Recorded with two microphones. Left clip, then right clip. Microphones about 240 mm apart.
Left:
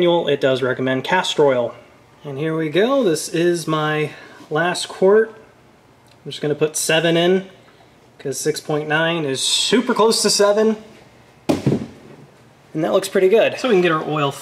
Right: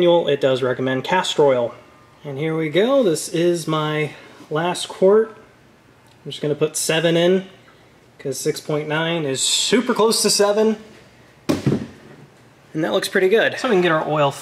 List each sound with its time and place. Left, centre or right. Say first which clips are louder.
0.0 s speech: right 1 dB; centre
11.4 s a sound: left 2 dB; centre
12.7 s speech: left 2 dB; centre